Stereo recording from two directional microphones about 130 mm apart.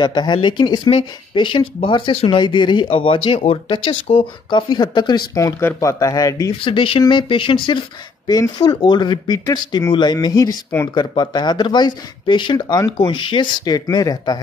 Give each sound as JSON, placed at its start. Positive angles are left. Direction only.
{"t": 0.0, "sound": "speech", "side_deg": 35}
{"t": 6.6, "sound": "speech", "side_deg": 40}